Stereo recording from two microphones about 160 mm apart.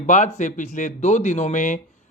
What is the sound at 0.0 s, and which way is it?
Speech, 50° left (ahead or behind).